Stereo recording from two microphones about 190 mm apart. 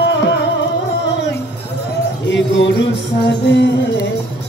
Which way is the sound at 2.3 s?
70° left (ahead or behind).